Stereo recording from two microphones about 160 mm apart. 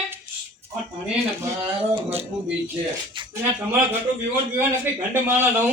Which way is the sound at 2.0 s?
40° right (ahead or behind).